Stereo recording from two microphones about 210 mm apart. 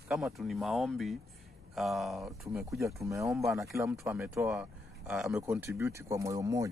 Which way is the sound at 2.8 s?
15° right (ahead or behind).